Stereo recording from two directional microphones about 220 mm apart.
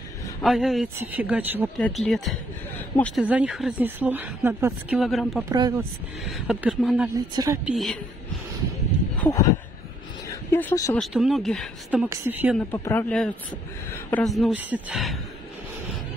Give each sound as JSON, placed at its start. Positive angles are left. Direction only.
{"t": 0.4, "sound": "a man's voice", "side_deg": 0}
{"t": 1.8, "sound": "a woman's voice", "side_deg": 5}
{"t": 5.4, "sound": "a man's voice", "side_deg": -15}
{"t": 6.2, "sound": "a woman's voice", "side_deg": -5}
{"t": 7.2, "sound": "a man's voice", "side_deg": -15}
{"t": 7.6, "sound": "a woman's voice", "side_deg": 0}
{"t": 9.2, "sound": "speech", "side_deg": 15}
{"t": 10.5, "sound": "a man's voice", "side_deg": 10}
{"t": 11.0, "sound": "a woman's voice", "side_deg": 0}
{"t": 12.5, "sound": "a man's voice", "side_deg": 10}
{"t": 14.2, "sound": "a woman's voice", "side_deg": 0}